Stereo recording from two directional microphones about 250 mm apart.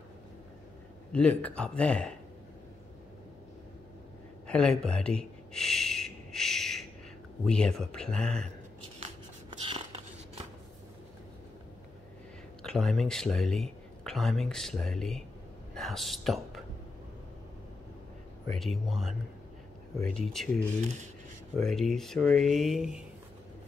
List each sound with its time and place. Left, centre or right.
1.1 s speech: centre
4.5 s a sound: centre
7.4 s speech: centre
9.5 s a sound: right
12.6 s speech: centre
18.5 s speech: centre
20.8 s speech: right
21.5 s speech: centre